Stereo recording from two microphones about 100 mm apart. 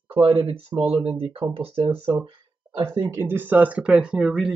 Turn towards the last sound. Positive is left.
turn(degrees=-5)  # may be behind; listen again after turning